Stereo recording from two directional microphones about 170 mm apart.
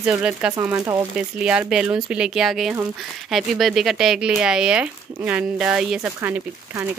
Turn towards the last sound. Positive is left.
turn(degrees=-15)  # may be behind; listen again after turning